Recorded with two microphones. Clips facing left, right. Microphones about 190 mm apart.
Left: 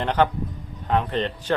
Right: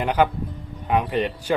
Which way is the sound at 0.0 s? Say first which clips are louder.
Right 1 dB; 10° right (ahead or behind).